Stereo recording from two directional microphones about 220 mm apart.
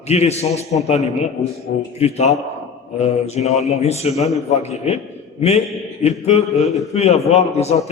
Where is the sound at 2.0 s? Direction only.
30° left (ahead or behind).